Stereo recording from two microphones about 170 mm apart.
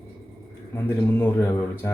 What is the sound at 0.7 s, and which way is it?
Speech, 15° left (ahead or behind).